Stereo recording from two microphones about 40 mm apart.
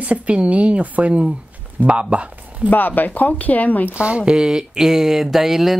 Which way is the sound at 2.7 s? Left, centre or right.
Left.